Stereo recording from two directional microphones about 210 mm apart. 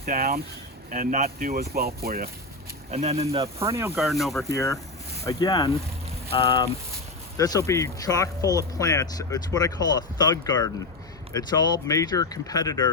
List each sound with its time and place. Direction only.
0.0 s speech: 45° right (ahead or behind)
2.9 s speech: 30° right (ahead or behind)
3.4 s speech: 15° right (ahead or behind)
3.9 s speech: centre (ahead or behind)
4.4 s speech: 15° left (ahead or behind)